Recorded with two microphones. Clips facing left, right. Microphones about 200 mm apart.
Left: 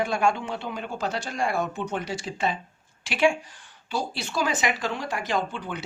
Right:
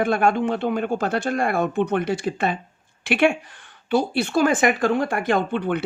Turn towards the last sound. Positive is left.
turn(degrees=-60)  # may be behind; listen again after turning